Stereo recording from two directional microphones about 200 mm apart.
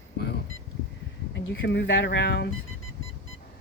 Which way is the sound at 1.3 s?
60° left (ahead or behind).